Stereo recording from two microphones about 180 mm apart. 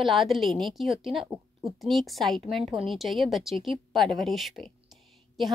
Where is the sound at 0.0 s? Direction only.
Centre (ahead or behind).